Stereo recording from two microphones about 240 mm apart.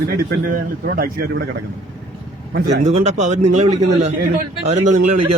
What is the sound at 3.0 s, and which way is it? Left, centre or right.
Speech, right.